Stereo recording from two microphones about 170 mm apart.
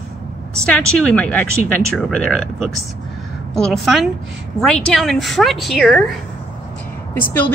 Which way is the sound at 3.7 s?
Centre (ahead or behind).